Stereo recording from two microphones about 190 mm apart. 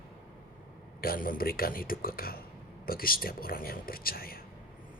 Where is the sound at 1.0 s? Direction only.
50° left (ahead or behind).